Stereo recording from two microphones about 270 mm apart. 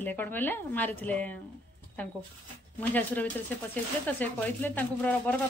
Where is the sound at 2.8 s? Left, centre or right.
Centre.